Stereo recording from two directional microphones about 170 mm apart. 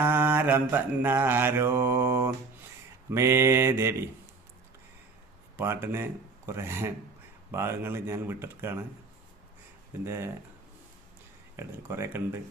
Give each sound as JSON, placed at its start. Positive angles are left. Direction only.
{"t": 0.0, "sound": "mantra", "side_deg": -10}
{"t": 5.5, "sound": "speech", "side_deg": -15}
{"t": 7.5, "sound": "mantra", "side_deg": -15}
{"t": 10.0, "sound": "mantra", "side_deg": -15}
{"t": 11.5, "sound": "mantra", "side_deg": -15}